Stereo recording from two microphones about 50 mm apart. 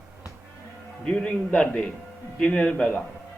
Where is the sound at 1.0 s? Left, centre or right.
Centre.